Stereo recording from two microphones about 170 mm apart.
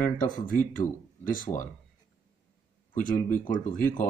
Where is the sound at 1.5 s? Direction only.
30° left (ahead or behind).